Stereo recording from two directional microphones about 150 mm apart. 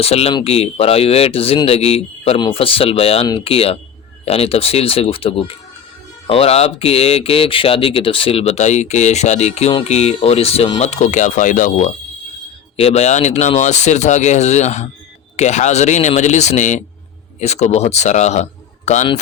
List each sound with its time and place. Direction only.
0.0 s speech: 40° left (ahead or behind); by 11.9 s 60° left (ahead or behind)
12.7 s speech: 45° left (ahead or behind)